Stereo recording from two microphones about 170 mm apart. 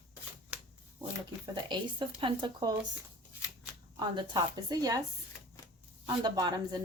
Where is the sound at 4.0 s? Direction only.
25° right (ahead or behind).